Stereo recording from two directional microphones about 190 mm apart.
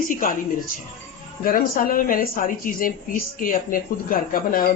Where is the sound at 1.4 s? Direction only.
50° left (ahead or behind).